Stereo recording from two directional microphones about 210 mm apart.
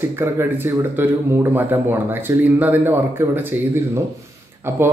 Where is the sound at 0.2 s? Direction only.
10° right (ahead or behind).